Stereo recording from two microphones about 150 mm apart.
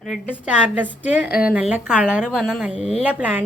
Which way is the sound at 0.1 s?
10° right (ahead or behind).